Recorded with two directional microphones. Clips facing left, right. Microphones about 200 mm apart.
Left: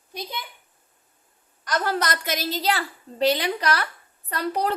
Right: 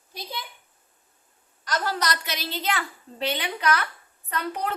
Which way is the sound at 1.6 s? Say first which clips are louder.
Left 2 dB; 55° left (ahead or behind).